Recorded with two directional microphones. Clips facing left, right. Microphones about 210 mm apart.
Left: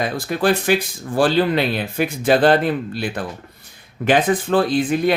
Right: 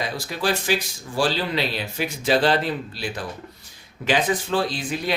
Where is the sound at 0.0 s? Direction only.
55° left (ahead or behind).